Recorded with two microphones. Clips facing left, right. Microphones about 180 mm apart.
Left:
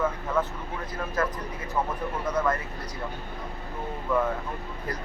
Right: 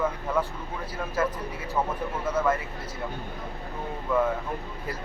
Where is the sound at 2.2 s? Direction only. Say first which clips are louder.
Right 1 dB; 5° right (ahead or behind).